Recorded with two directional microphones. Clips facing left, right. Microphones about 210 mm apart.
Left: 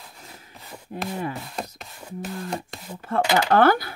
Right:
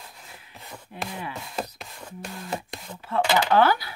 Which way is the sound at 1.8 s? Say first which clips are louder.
Left 4 dB; centre (ahead or behind).